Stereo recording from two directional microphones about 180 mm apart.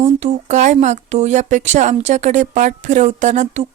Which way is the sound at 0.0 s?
40° right (ahead or behind).